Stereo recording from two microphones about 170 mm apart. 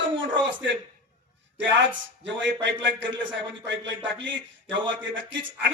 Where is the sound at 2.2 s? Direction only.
90° right.